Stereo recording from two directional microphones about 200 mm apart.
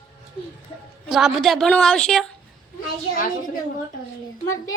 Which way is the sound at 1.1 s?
Centre (ahead or behind).